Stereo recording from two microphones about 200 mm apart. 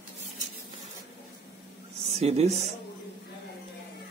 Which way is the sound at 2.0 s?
30° right (ahead or behind).